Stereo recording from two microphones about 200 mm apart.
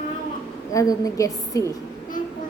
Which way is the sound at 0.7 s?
15° left (ahead or behind).